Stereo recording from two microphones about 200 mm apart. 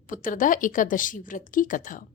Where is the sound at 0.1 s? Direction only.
40° left (ahead or behind).